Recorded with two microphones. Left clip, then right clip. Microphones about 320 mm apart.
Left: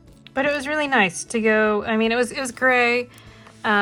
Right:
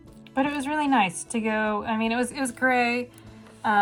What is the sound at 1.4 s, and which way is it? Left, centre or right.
Speech, left.